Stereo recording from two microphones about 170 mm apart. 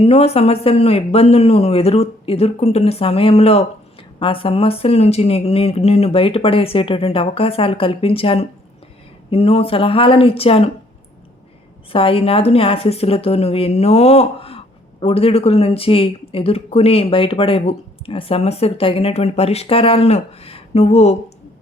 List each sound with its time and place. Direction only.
0.0 s speech: 40° left (ahead or behind)
11.9 s speech: 30° left (ahead or behind)